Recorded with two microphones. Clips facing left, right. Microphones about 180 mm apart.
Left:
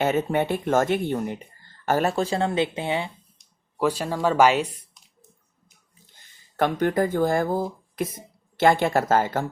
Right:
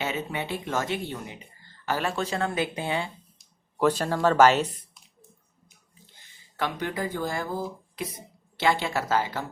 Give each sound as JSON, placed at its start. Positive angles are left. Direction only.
{"t": 0.0, "sound": "speech", "side_deg": 50}
{"t": 3.8, "sound": "speech", "side_deg": 10}
{"t": 6.6, "sound": "speech", "side_deg": 50}